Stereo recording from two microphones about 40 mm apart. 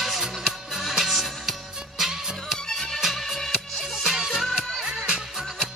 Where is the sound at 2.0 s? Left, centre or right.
Centre.